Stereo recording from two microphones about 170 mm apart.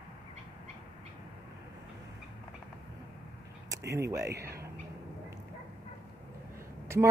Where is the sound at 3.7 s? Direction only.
15° right (ahead or behind).